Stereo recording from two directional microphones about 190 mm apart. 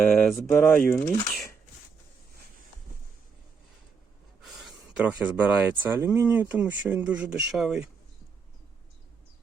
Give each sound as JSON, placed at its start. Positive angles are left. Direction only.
{"t": 0.1, "sound": "speech", "side_deg": 0}
{"t": 4.4, "sound": "speech", "side_deg": -5}